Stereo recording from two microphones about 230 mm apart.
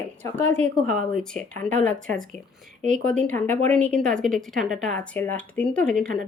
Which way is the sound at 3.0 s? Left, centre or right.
Centre.